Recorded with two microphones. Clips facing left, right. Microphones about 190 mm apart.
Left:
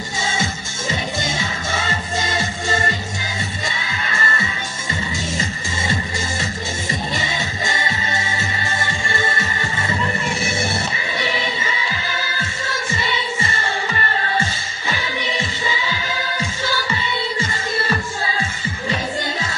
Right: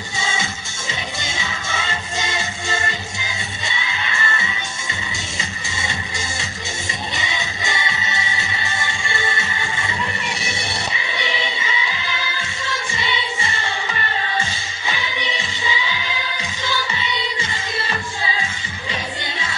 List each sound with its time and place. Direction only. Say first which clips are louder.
0.2 s music: left 2 dB; 50° left (ahead or behind)
3.7 s music: left 1 dB; 45° left (ahead or behind)
7.2 s music: left 3 dB; 45° left (ahead or behind)
13.0 s music: left 1 dB; 45° left (ahead or behind)
15.0 s music: left 5 dB; 45° left (ahead or behind)